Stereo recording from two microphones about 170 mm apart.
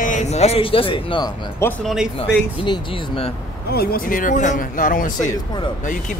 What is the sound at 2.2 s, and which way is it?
A man's voice, 30° left (ahead or behind).